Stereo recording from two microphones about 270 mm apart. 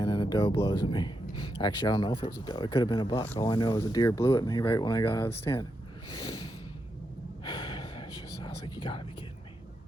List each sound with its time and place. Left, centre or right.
0.0 s speech: centre
7.4 s gasp: centre